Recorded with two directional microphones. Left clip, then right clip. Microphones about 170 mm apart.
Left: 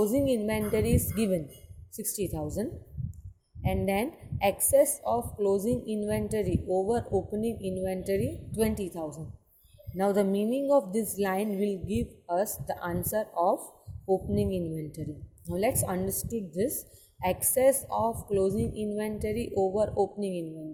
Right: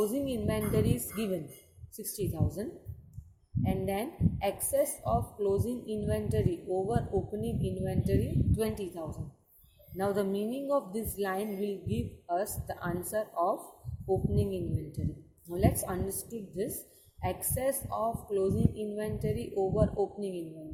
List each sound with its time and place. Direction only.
0.0 s a woman's voice: 35° left (ahead or behind)